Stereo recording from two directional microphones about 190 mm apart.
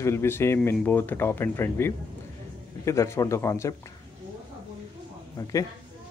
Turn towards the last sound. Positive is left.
turn(degrees=20)  # may be behind; listen again after turning